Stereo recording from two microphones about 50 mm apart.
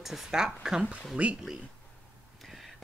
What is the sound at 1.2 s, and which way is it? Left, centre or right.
Speech, right.